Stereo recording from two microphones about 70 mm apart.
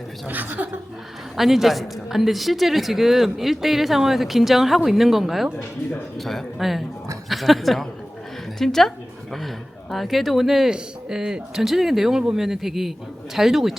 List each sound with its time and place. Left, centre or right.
0.3 s a woman's voice: right
1.4 s a woman's voice: centre
9.9 s a woman's voice: centre